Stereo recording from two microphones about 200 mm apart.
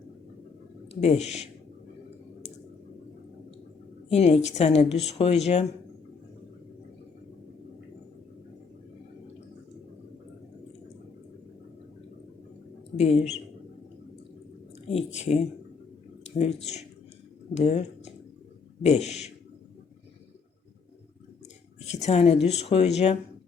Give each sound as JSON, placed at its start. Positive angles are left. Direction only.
{"t": 1.0, "sound": "speech", "side_deg": 35}
{"t": 4.1, "sound": "speech", "side_deg": 30}
{"t": 13.0, "sound": "speech", "side_deg": 35}
{"t": 14.8, "sound": "speech", "side_deg": 30}
{"t": 17.5, "sound": "speech", "side_deg": 35}
{"t": 21.8, "sound": "a sound", "side_deg": 35}
{"t": 22.4, "sound": "speech", "side_deg": 30}